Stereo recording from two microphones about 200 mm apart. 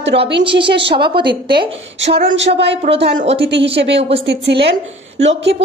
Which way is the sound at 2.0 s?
65° right (ahead or behind).